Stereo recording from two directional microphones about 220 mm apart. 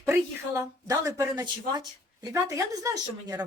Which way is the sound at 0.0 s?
10° right (ahead or behind).